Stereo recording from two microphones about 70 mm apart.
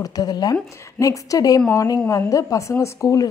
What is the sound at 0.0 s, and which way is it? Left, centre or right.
Speech, left.